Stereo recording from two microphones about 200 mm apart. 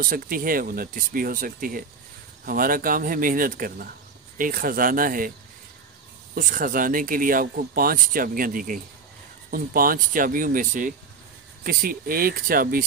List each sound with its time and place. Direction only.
0.0 s speech: 45° right (ahead or behind)
6.3 s speech: 40° right (ahead or behind)